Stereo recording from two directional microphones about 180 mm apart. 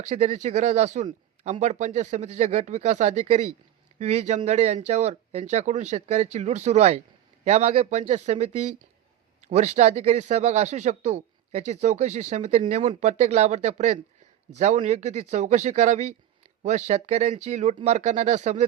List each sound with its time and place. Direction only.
0.0 s speech: 40° right (ahead or behind)